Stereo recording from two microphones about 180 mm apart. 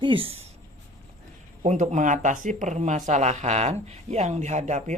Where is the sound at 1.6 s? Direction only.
45° right (ahead or behind).